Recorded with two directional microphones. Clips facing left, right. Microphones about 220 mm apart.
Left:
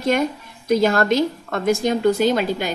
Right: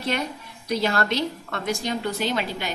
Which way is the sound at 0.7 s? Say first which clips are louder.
Left 7 dB; 45° left (ahead or behind).